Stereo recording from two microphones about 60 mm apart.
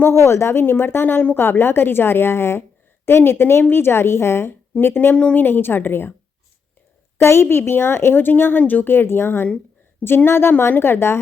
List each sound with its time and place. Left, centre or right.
0.1 s a woman's voice: left
5.1 s speech: left
5.5 s speech: left
7.2 s speech: left